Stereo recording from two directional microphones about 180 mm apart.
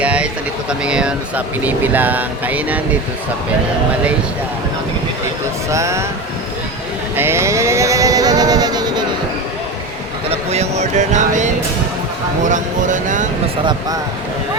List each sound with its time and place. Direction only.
0.0 s a sound: 5° right (ahead or behind)
0.7 s speech: 5° right (ahead or behind)
5.6 s speech: 15° right (ahead or behind)
7.2 s vehicle: 15° right (ahead or behind)
10.2 s a sound: 35° right (ahead or behind)
12.5 s speech: 45° right (ahead or behind)